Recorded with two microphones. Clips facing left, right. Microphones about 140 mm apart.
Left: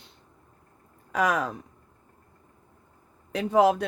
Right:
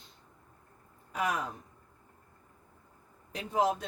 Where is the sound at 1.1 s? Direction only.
90° left.